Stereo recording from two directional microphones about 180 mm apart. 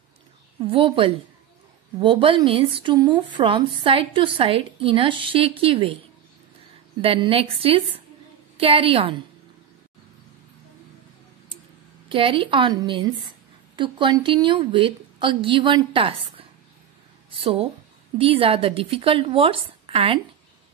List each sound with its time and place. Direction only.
0.6 s speech: 30° right (ahead or behind)
7.0 s speech: 30° right (ahead or behind)
12.1 s speech: 30° right (ahead or behind)